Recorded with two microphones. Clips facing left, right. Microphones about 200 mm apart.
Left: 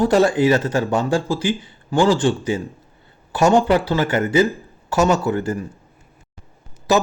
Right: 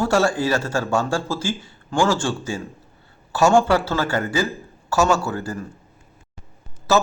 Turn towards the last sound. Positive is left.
turn(degrees=15)  # may be behind; listen again after turning